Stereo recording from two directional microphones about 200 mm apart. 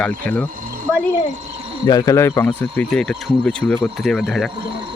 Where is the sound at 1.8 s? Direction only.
20° left (ahead or behind); by 4.5 s 5° left (ahead or behind).